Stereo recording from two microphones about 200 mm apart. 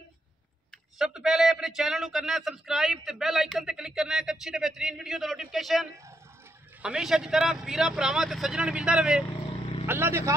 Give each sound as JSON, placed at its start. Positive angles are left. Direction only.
{"t": 0.9, "sound": "speech", "side_deg": -5}
{"t": 9.2, "sound": "vehicle", "side_deg": 25}
{"t": 9.8, "sound": "speech", "side_deg": -10}